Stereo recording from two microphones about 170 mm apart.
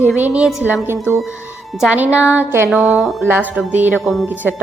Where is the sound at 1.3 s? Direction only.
15° left (ahead or behind).